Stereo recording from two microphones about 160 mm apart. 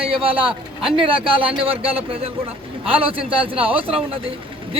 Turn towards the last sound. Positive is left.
turn(degrees=-35)  # may be behind; listen again after turning